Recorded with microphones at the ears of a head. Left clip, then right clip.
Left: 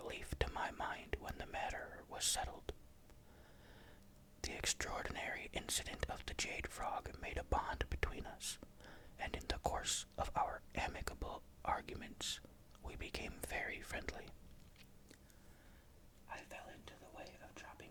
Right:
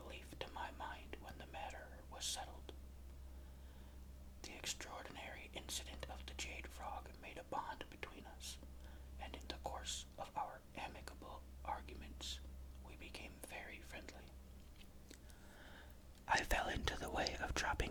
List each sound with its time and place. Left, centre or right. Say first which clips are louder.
0.0 s whispering: left 7 dB; left
4.4 s whispering: left 6 dB; left
16.2 s speech: right 14 dB; right